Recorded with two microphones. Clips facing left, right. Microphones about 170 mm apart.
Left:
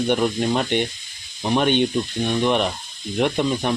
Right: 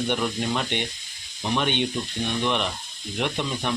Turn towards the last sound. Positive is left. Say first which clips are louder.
# left 7 dB
turn(degrees=45)  # may be behind; listen again after turning